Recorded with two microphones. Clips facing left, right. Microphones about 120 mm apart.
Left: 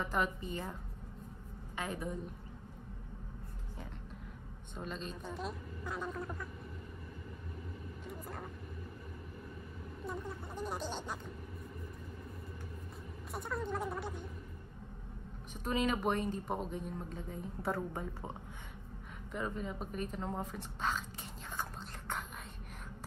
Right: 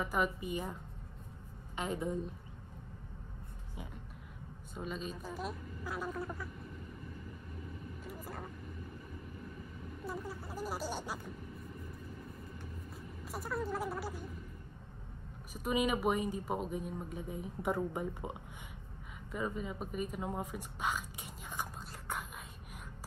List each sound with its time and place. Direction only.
0.0 s speech: 10° right (ahead or behind)
1.8 s a woman's voice: 20° right (ahead or behind)
4.7 s a woman's voice: 5° right (ahead or behind)
8.0 s vehicle: centre (ahead or behind)
10.0 s a woman's voice: 5° right (ahead or behind)
13.3 s a woman's voice: 5° right (ahead or behind)
15.5 s speech: 10° right (ahead or behind)
19.3 s speech: 5° right (ahead or behind)